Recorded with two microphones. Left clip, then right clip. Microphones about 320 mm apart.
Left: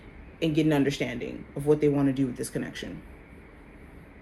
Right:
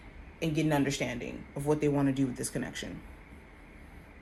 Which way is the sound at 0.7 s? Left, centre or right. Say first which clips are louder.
Left 4 dB; right.